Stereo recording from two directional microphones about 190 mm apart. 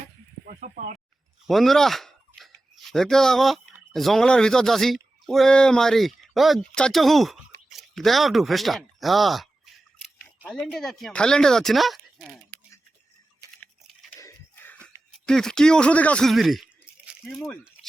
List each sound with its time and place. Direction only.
0.4 s speech: 40° right (ahead or behind)
1.5 s speech: centre (ahead or behind)
14.2 s a sound: 15° left (ahead or behind)
14.8 s speech: 5° left (ahead or behind)